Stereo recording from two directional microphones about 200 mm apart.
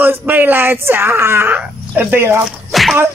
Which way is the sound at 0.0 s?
10° right (ahead or behind).